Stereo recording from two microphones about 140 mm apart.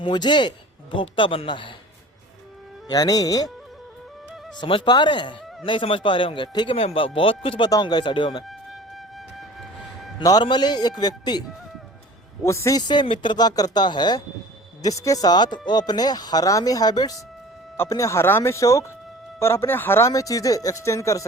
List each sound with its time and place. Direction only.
0.0 s a man's voice: 35° left (ahead or behind)
2.9 s speech: 25° left (ahead or behind)
4.5 s speech: 35° left (ahead or behind)
10.2 s speech: 30° left (ahead or behind)
12.5 s speech: 25° left (ahead or behind)